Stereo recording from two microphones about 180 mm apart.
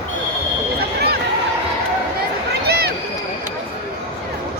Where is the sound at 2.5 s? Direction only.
60° right (ahead or behind).